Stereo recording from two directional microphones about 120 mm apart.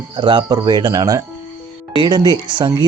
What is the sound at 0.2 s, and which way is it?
Speech, 40° right (ahead or behind).